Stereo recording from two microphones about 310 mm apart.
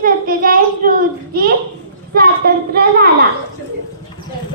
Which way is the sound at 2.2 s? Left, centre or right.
Right.